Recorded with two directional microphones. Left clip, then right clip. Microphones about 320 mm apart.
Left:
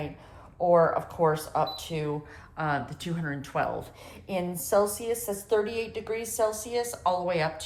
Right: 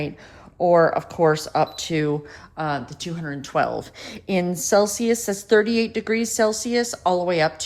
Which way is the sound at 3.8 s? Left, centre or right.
Right.